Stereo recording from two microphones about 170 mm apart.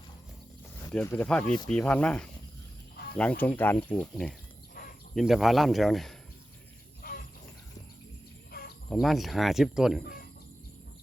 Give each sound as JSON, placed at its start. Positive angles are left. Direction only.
{"t": 1.0, "sound": "speech", "side_deg": 10}
{"t": 7.0, "sound": "a sound", "side_deg": 60}
{"t": 8.9, "sound": "speech", "side_deg": 0}